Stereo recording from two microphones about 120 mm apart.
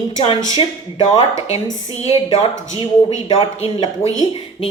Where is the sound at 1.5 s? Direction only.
60° left (ahead or behind).